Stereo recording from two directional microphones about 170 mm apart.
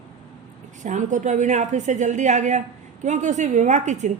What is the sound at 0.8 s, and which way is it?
A woman's voice, 45° right (ahead or behind).